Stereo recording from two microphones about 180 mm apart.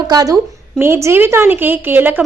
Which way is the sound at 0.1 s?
20° right (ahead or behind).